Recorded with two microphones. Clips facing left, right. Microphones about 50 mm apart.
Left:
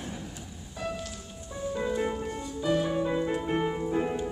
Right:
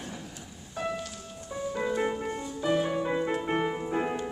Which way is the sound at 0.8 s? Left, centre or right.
Right.